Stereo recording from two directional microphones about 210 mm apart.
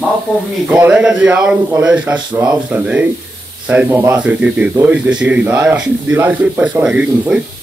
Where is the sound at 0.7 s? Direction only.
5° right (ahead or behind).